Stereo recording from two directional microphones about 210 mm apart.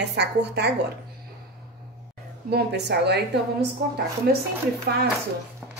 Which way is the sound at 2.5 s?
50° right (ahead or behind).